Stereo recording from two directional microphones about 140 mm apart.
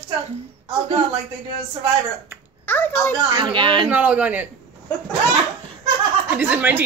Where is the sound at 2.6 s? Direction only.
15° left (ahead or behind).